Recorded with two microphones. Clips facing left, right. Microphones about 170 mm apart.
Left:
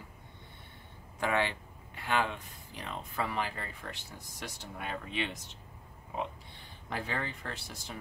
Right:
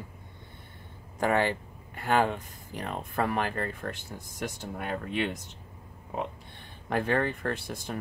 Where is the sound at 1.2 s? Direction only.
45° right (ahead or behind).